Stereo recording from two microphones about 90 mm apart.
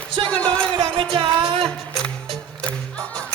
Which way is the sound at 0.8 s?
70° right (ahead or behind).